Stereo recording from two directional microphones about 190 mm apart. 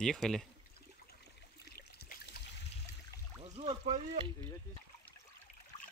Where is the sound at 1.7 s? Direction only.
55° left (ahead or behind).